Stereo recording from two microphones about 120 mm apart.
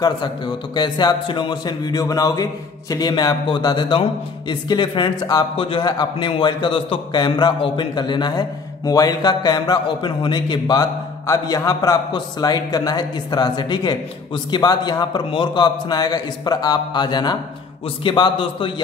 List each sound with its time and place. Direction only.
0.7 s a man's voice: 35° left (ahead or behind)